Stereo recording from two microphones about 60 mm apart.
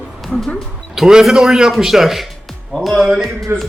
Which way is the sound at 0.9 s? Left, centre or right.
Centre.